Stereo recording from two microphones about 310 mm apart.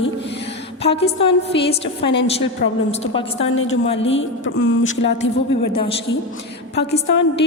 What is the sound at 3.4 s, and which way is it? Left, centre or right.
A woman's voice, left.